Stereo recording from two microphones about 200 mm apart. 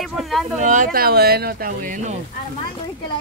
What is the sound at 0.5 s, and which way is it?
Speech, 40° right (ahead or behind).